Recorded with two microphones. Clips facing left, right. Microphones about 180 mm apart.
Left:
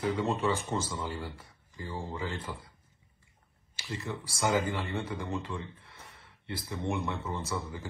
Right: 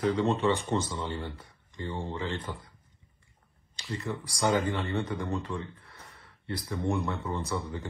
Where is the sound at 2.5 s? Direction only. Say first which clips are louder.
Right 2 dB; 30° right (ahead or behind).